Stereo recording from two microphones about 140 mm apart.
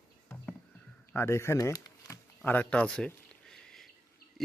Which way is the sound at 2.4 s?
10° left (ahead or behind).